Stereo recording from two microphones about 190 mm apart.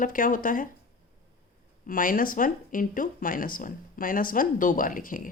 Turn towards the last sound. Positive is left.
turn(degrees=45)  # may be behind; listen again after turning